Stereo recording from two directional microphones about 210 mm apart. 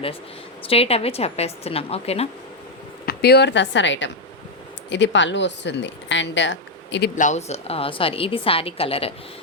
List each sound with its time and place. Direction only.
0.6 s a woman's voice: 25° left (ahead or behind)
3.1 s speech: 50° left (ahead or behind)
7.2 s a woman's voice: 35° left (ahead or behind)